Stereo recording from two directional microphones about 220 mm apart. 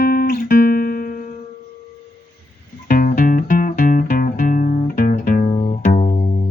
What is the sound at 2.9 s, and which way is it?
Music, 40° left (ahead or behind).